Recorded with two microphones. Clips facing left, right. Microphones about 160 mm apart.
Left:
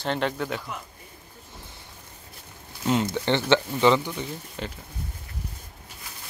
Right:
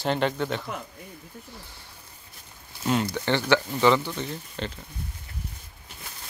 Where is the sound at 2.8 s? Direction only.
20° left (ahead or behind).